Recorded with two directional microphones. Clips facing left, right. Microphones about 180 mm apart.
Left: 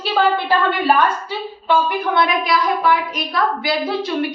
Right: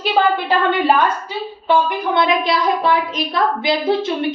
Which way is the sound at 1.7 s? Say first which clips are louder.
Right 1 dB; 25° right (ahead or behind).